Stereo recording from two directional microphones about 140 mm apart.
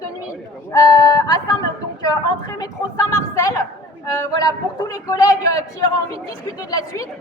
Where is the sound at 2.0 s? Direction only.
25° left (ahead or behind).